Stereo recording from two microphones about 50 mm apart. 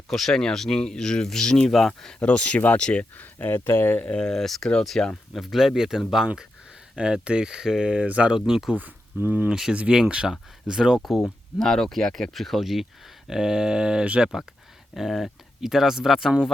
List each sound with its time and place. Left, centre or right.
0.1 s speech: centre
2.2 s speech: left
3.2 s speech: left
4.1 s speech: centre
5.4 s speech: centre
6.9 s speech: centre
8.0 s speech: right
8.3 s speech: centre
9.2 s speech: right
9.7 s speech: right
10.7 s speech: centre
11.0 s speech: centre
14.0 s speech: right
14.9 s speech: centre